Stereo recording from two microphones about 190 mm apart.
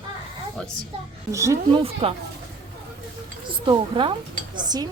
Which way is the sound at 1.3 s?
15° right (ahead or behind).